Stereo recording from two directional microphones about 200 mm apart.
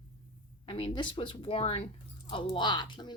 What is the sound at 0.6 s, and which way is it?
Speech, 25° left (ahead or behind).